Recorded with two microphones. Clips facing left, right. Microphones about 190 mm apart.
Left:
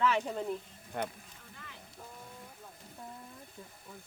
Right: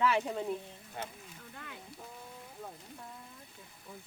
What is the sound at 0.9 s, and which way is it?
Speech, 55° left (ahead or behind).